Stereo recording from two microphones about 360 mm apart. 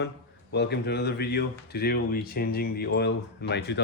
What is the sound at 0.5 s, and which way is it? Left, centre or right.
Speech, left.